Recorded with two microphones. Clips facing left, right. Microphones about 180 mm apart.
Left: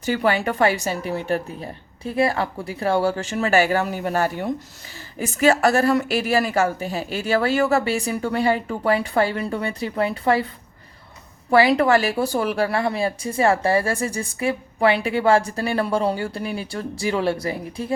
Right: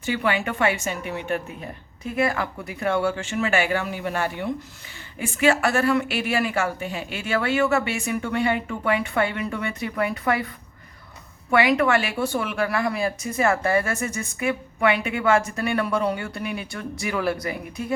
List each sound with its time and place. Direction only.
0.0 s speech: 40° left (ahead or behind)
11.5 s speech: 35° left (ahead or behind)